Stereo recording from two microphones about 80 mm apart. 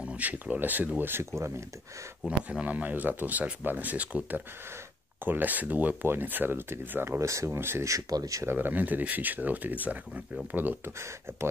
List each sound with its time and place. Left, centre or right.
0.0 s speech: centre
2.2 s speech: centre; by 8.5 s right
8.5 s speech: right